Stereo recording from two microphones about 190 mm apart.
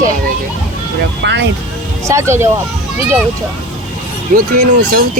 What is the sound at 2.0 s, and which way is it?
Speech, 15° right (ahead or behind).